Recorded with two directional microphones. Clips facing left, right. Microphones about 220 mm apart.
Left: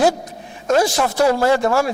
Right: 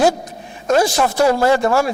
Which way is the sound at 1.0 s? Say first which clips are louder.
Right 1 dB; 35° right (ahead or behind).